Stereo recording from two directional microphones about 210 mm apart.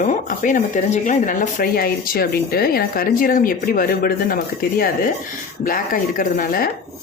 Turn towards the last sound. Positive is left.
turn(degrees=40)  # may be behind; listen again after turning